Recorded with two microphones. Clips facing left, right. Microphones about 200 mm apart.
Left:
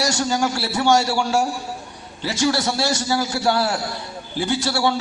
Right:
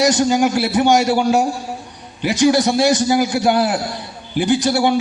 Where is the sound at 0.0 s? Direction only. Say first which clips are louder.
Right 7 dB; 20° right (ahead or behind).